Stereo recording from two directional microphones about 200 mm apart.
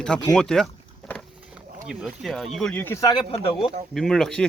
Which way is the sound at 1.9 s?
Centre (ahead or behind).